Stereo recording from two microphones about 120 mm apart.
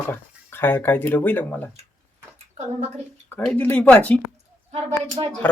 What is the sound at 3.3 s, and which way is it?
Speech, 15° left (ahead or behind).